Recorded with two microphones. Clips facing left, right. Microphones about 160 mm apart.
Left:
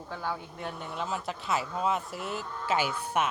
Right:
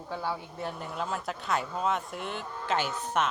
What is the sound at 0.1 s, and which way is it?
Speech, 10° right (ahead or behind).